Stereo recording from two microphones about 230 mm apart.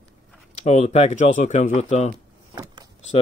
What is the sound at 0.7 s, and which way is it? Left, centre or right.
Speech, left.